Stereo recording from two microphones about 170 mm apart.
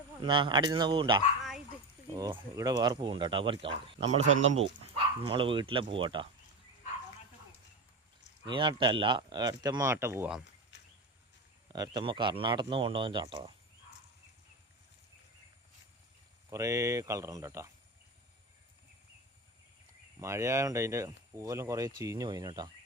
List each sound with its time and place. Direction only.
0.2 s speech: 30° right (ahead or behind)
4.0 s speech: 40° right (ahead or behind)
8.4 s speech: 30° right (ahead or behind)
10.7 s a sound: 90° left
11.7 s speech: 25° right (ahead or behind)
16.5 s speech: 20° right (ahead or behind)
20.1 s speech: 15° right (ahead or behind)